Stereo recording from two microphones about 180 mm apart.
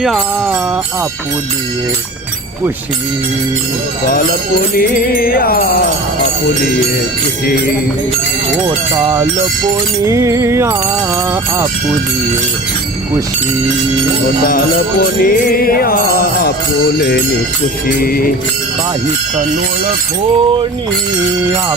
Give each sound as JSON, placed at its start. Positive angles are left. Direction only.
{"t": 0.0, "sound": "music", "side_deg": 0}
{"t": 4.8, "sound": "music", "side_deg": 55}
{"t": 10.0, "sound": "music", "side_deg": -15}
{"t": 14.4, "sound": "music", "side_deg": 55}
{"t": 17.8, "sound": "music", "side_deg": 55}